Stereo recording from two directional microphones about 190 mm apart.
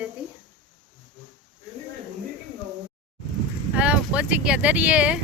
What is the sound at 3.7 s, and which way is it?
Speech, 5° right (ahead or behind).